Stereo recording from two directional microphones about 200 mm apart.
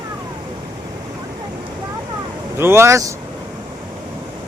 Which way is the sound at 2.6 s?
10° right (ahead or behind).